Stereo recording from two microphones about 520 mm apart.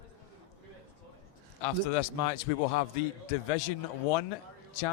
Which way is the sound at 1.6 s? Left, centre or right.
Left.